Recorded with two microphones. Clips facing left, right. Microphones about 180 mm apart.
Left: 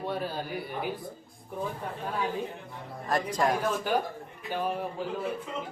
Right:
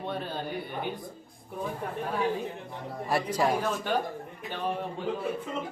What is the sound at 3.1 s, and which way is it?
Speech, 10° right (ahead or behind).